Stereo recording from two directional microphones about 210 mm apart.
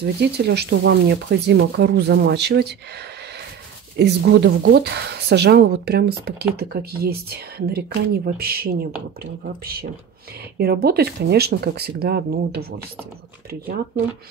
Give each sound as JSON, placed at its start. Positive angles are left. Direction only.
{"t": 0.0, "sound": "speech", "side_deg": -50}